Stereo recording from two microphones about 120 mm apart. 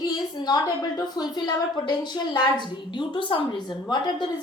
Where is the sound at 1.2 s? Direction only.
40° left (ahead or behind).